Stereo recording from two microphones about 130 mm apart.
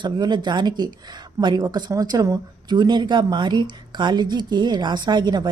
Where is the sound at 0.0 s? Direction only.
35° right (ahead or behind).